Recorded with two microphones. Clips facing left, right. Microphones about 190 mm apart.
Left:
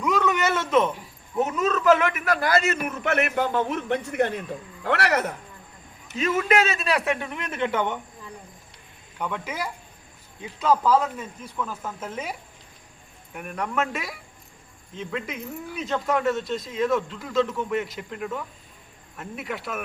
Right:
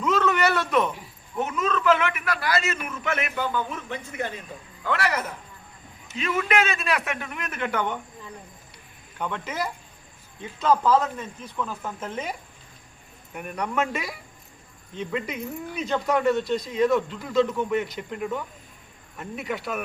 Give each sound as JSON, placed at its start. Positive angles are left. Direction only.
{"t": 0.0, "sound": "a sound", "side_deg": 15}
{"t": 1.4, "sound": "a man's voice", "side_deg": 40}
{"t": 2.8, "sound": "a man's voice", "side_deg": 65}
{"t": 6.5, "sound": "speech", "side_deg": 35}
{"t": 9.1, "sound": "speech", "side_deg": 10}